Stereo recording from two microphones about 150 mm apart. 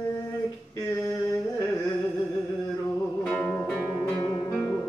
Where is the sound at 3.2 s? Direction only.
5° left (ahead or behind).